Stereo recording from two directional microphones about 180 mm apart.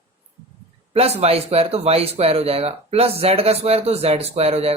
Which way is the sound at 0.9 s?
35° right (ahead or behind).